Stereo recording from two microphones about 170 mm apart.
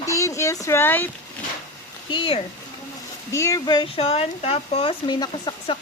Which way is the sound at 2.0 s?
30° left (ahead or behind).